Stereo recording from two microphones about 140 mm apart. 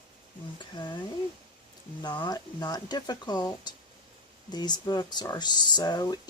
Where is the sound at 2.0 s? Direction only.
30° left (ahead or behind).